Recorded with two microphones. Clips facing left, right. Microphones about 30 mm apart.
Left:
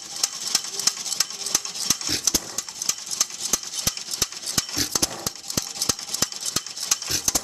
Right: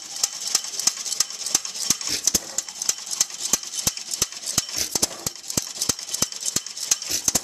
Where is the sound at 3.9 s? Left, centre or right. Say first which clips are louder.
Even; left.